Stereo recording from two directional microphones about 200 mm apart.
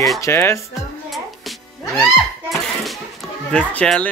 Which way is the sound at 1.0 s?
Centre (ahead or behind).